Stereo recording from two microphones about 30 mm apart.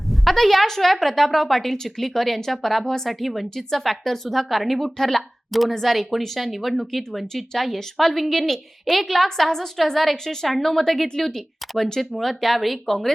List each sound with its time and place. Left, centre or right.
0.1 s a woman's voice: centre
2.8 s a woman's voice: centre
3.1 s a woman's voice: centre